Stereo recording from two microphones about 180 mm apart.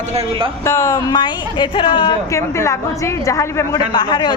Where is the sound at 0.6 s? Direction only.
15° left (ahead or behind).